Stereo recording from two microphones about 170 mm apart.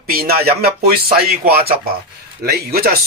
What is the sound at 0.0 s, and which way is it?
Speech, 60° right (ahead or behind).